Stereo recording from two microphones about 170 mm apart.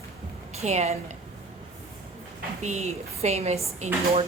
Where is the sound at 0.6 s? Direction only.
40° right (ahead or behind).